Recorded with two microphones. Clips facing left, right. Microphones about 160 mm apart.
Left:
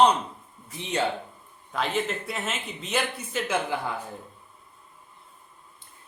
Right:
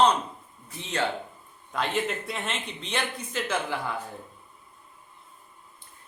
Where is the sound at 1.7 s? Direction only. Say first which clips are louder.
Left 1 dB; centre (ahead or behind).